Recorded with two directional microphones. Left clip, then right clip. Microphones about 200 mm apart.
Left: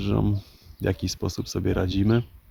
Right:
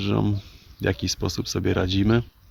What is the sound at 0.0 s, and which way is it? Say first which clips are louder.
Speech: right 2 dB; centre (ahead or behind).